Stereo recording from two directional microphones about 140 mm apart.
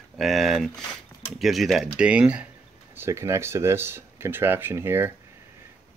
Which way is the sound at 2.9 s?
20° right (ahead or behind).